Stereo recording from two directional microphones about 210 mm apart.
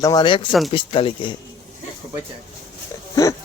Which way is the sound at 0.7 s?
25° left (ahead or behind).